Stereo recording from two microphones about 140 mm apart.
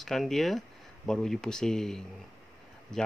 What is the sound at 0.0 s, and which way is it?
Speech, centre (ahead or behind).